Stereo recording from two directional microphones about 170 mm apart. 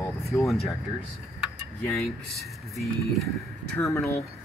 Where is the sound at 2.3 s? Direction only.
Centre (ahead or behind).